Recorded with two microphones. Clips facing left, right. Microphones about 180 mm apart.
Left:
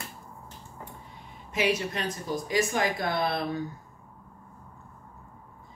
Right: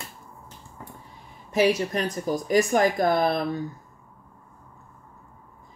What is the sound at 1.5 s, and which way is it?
Speech, 40° right (ahead or behind).